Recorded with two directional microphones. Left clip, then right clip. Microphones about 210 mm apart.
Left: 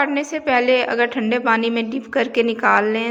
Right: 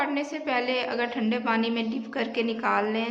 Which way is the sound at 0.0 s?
30° left (ahead or behind).